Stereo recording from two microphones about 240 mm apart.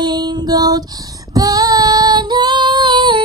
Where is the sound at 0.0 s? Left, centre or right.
Centre.